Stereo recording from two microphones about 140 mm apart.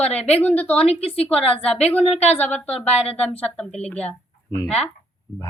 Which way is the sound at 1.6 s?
10° left (ahead or behind).